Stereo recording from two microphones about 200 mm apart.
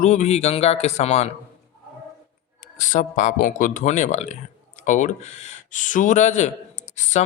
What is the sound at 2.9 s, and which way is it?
Speech, 40° left (ahead or behind).